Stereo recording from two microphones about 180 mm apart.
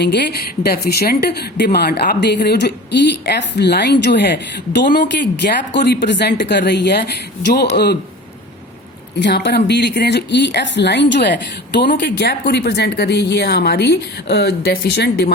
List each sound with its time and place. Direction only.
0.0 s a woman's voice: 70° left (ahead or behind)
9.1 s a woman's voice: 75° left (ahead or behind)